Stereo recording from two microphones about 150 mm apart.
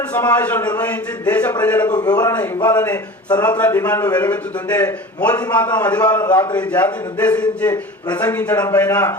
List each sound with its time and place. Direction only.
0.1 s a man's voice: 10° left (ahead or behind)
1.9 s a man's voice: 25° left (ahead or behind)
2.6 s a man's voice: 15° left (ahead or behind)
3.2 s a man's voice: 30° left (ahead or behind)
3.6 s a man's voice: 15° left (ahead or behind)